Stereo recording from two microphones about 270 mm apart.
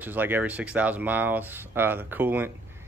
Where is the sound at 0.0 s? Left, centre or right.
Centre.